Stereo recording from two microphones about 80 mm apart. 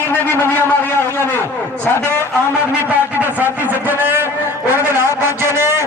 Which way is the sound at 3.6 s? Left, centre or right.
Right.